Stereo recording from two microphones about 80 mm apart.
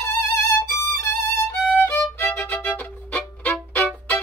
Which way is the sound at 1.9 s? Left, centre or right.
Left.